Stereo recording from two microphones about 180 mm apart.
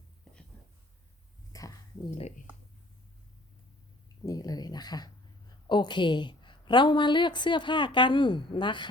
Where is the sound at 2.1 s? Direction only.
40° left (ahead or behind).